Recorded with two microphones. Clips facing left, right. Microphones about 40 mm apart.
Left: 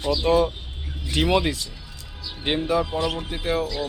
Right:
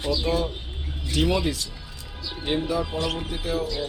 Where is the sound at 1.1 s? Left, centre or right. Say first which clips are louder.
Left 2 dB; left.